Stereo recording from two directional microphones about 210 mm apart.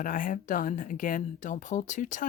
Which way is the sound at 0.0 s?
40° left (ahead or behind).